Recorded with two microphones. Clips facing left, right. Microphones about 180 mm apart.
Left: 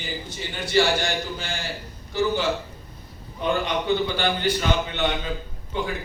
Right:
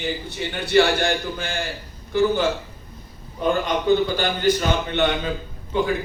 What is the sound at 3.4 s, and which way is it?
A man's voice, 45° right (ahead or behind).